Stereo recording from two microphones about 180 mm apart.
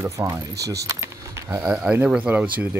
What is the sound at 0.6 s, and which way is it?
Speech, 65° right (ahead or behind).